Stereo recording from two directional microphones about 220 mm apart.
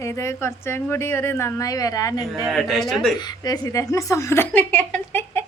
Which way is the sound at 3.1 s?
20° left (ahead or behind).